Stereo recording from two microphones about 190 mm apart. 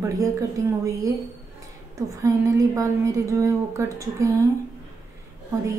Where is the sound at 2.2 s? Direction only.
15° right (ahead or behind).